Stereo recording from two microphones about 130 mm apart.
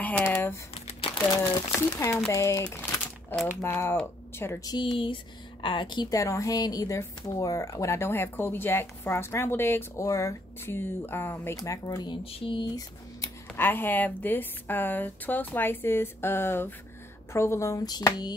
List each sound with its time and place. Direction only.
0.0 s speech: 10° left (ahead or behind)
0.7 s crumpling: 45° left (ahead or behind)
1.4 s a woman's voice: 25° left (ahead or behind)
4.6 s a woman's voice: 35° left (ahead or behind); by 11.5 s 15° left (ahead or behind)
11.5 s a woman's voice: 30° left (ahead or behind)
12.3 s speech: 45° left (ahead or behind)
13.6 s a woman's voice: 15° left (ahead or behind); by 18.3 s 30° left (ahead or behind)